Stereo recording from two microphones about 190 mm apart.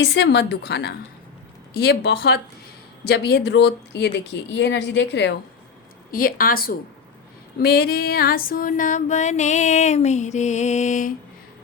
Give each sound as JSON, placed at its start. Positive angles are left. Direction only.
{"t": 0.0, "sound": "speech", "side_deg": 65}
{"t": 6.1, "sound": "a woman's voice", "side_deg": 50}
{"t": 7.6, "sound": "music", "side_deg": 55}